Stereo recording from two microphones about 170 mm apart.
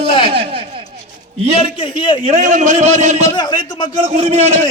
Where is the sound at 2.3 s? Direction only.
45° right (ahead or behind).